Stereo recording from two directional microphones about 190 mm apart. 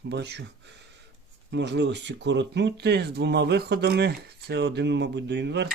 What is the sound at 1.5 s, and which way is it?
Speech, 70° right (ahead or behind).